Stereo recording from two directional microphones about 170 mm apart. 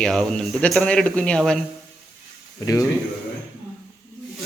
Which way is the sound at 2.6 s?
20° left (ahead or behind).